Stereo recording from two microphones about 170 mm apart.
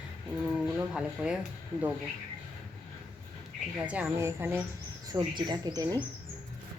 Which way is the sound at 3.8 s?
10° right (ahead or behind).